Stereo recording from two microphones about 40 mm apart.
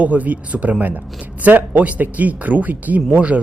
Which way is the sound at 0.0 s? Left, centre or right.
Right.